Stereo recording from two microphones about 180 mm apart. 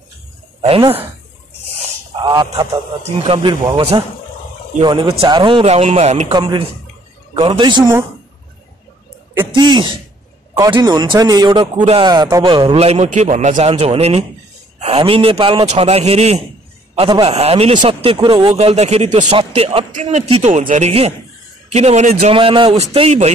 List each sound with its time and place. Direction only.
0.6 s speech: 30° right (ahead or behind)
2.2 s a man's voice: 20° right (ahead or behind); by 6.2 s 40° right (ahead or behind)
6.3 s speech: 25° right (ahead or behind)
9.6 s a man's voice: 25° right (ahead or behind)